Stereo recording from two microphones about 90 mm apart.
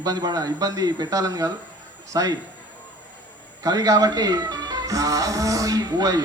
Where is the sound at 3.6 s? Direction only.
40° right (ahead or behind).